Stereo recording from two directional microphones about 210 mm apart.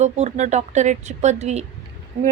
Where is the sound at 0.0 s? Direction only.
35° right (ahead or behind).